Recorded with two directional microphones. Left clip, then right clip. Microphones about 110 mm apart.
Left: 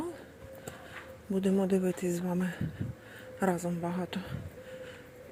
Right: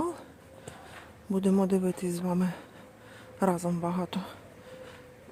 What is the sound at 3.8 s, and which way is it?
Speech, 35° right (ahead or behind).